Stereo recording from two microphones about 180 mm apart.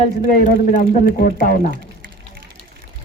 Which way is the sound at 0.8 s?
55° left (ahead or behind).